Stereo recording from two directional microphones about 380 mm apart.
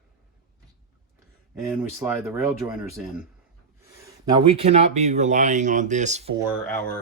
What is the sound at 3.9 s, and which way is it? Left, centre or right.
Speech, centre.